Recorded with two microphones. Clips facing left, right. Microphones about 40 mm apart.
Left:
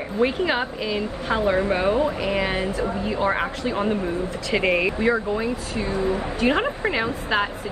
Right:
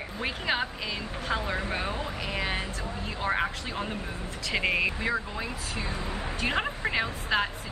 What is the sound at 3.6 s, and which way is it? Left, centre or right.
A woman's voice, centre.